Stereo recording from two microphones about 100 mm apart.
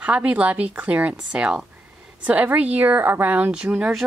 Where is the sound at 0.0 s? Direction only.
15° right (ahead or behind).